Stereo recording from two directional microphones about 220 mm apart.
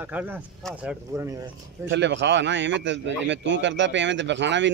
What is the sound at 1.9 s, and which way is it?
A man's voice, 55° right (ahead or behind).